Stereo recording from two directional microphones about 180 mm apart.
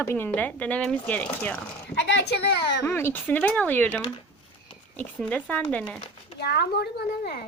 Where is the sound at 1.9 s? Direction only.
70° left (ahead or behind).